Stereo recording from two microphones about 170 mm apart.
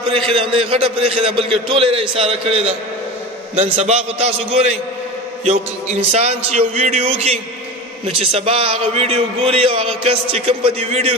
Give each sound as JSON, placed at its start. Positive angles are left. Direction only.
{"t": 0.1, "sound": "a man's voice", "side_deg": -35}